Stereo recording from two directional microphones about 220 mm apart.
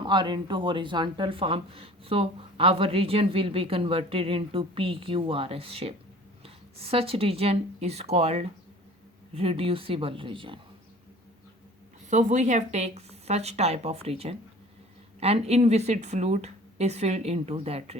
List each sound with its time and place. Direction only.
0.0 s speech: 20° right (ahead or behind)
12.1 s speech: 35° right (ahead or behind)